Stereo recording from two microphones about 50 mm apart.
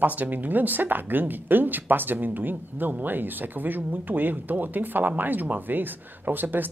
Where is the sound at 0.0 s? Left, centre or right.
Right.